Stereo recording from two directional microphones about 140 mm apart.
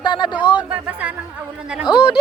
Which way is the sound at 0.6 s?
10° right (ahead or behind).